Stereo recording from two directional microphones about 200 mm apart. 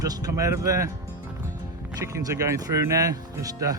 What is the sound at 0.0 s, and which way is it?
Speech, 20° right (ahead or behind).